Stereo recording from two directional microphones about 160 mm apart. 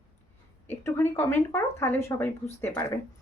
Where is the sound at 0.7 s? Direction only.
15° left (ahead or behind).